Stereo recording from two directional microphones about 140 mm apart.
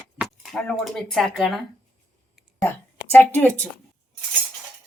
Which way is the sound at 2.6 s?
15° left (ahead or behind).